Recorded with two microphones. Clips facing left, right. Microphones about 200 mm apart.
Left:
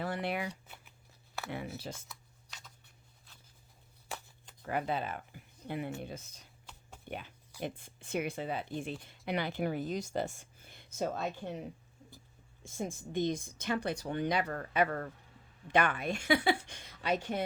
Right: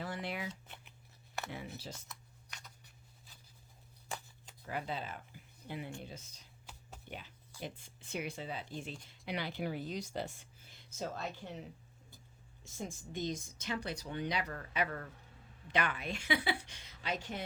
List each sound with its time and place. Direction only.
0.0 s a sound: 60° left (ahead or behind)
1.5 s speech: 60° left (ahead or behind)
2.0 s shuffling cards: centre (ahead or behind)
4.6 s speech: 55° left (ahead or behind)
12.6 s speech: 55° left (ahead or behind)